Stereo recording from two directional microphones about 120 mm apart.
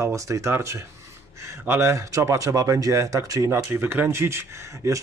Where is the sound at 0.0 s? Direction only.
25° right (ahead or behind).